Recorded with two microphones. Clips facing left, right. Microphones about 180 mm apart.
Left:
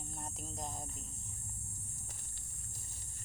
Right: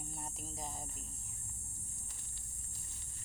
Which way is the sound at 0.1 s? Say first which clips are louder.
Left 1 dB; 5° right (ahead or behind).